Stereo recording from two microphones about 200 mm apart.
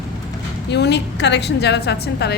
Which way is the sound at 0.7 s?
60° left (ahead or behind).